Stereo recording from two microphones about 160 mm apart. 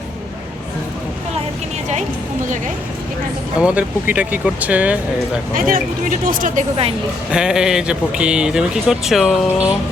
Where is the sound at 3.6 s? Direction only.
10° right (ahead or behind).